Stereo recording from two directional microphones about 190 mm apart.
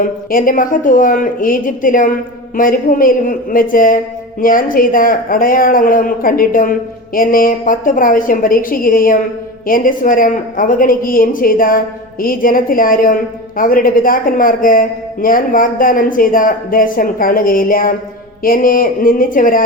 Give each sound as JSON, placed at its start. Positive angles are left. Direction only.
{"t": 0.0, "sound": "speech", "side_deg": 45}